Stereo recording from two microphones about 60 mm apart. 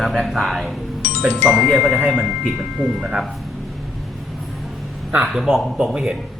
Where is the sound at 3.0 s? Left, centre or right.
Centre.